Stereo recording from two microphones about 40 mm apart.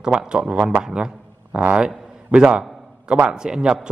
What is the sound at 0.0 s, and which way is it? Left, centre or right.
Speech, right.